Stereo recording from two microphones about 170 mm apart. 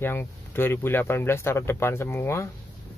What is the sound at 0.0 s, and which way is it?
Speech, 15° left (ahead or behind).